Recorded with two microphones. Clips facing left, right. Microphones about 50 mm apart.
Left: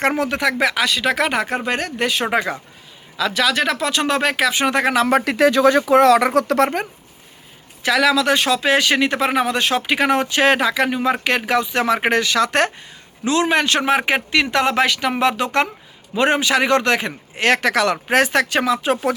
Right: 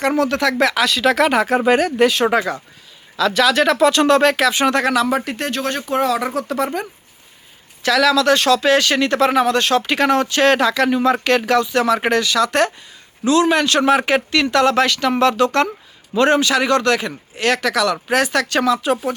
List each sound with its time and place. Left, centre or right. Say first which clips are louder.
0.2 s speech: right 2 dB; centre
0.6 s speech: right 2 dB; centre
5.1 s speech: left 6 dB; left
7.8 s speech: right 1 dB; centre